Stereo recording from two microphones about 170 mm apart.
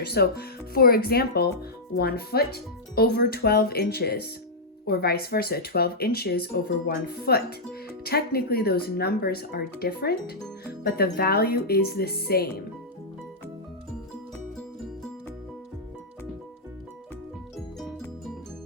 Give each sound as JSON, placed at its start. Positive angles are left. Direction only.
{"t": 0.0, "sound": "speech", "side_deg": 70}
{"t": 17.7, "sound": "music", "side_deg": 0}